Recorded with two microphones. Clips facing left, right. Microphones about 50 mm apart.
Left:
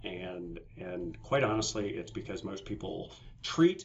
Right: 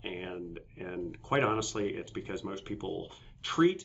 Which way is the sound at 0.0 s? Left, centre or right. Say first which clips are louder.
Right 1 dB; centre.